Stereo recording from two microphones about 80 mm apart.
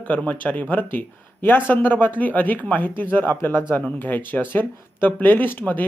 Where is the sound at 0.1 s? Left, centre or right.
Centre.